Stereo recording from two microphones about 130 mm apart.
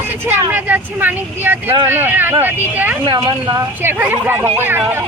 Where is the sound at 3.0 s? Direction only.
40° right (ahead or behind).